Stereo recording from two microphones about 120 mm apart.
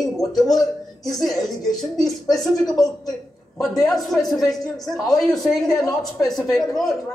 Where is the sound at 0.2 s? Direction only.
Centre (ahead or behind).